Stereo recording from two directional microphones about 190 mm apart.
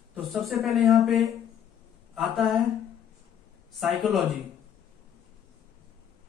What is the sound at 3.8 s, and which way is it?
Speech, centre (ahead or behind).